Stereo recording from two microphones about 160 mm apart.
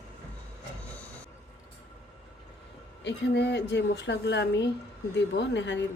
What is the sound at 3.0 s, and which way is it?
A woman's voice, 90° left.